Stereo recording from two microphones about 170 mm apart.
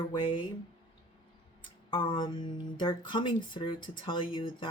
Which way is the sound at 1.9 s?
30° left (ahead or behind).